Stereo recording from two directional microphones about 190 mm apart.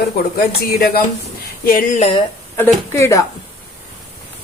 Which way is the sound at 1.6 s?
50° left (ahead or behind).